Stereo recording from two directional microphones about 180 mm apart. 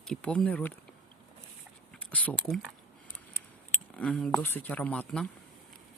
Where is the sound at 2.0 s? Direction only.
5° left (ahead or behind).